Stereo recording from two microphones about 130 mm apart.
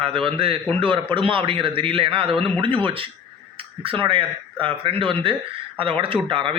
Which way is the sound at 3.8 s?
45° right (ahead or behind).